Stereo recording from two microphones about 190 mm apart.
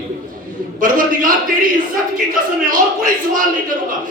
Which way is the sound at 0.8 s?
45° right (ahead or behind).